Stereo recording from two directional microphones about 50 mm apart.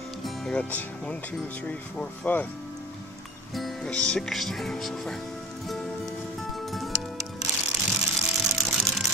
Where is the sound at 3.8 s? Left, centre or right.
Centre.